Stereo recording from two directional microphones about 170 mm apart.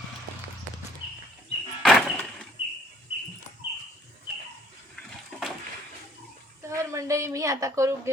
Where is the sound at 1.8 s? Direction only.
5° left (ahead or behind).